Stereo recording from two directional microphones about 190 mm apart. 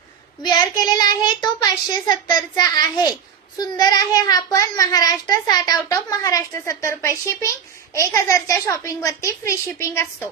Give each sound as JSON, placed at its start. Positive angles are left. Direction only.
{"t": 0.4, "sound": "a child's voice", "side_deg": 20}